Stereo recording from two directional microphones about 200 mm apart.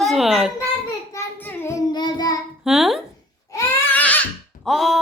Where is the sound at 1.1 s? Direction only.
10° left (ahead or behind).